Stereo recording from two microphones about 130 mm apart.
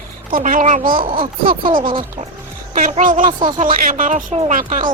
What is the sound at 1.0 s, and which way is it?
Speech, 40° right (ahead or behind).